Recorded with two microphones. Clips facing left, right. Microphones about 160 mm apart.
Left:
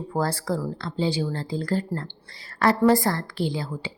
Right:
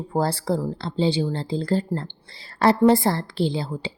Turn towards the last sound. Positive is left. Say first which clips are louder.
# right 3 dB
turn(degrees=-30)  # may be behind; listen again after turning